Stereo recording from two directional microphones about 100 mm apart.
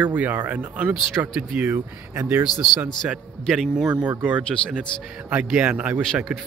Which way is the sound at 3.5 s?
5° right (ahead or behind).